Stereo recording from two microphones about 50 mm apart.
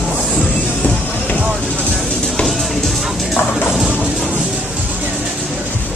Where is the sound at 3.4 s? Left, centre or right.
Left.